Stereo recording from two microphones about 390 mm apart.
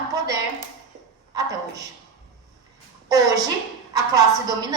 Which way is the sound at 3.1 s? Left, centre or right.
Centre.